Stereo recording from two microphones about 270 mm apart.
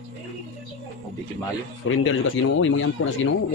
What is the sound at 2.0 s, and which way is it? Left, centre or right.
Speech, left.